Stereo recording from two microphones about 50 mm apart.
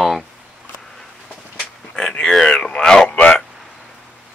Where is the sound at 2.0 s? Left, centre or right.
Centre.